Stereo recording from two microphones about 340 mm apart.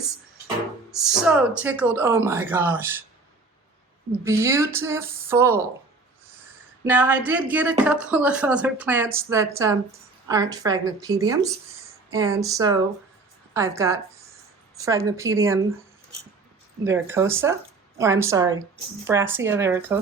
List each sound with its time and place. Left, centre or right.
0.4 s speech: centre
4.2 s speech: centre
6.8 s speech: centre
16.8 s speech: centre